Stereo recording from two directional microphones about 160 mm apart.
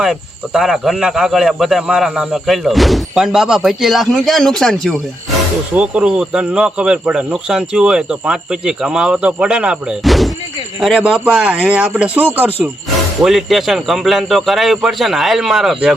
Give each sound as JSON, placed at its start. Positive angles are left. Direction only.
{"t": 0.0, "sound": "speech", "side_deg": -5}